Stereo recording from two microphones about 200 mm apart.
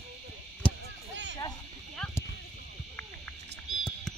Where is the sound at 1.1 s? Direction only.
65° right (ahead or behind).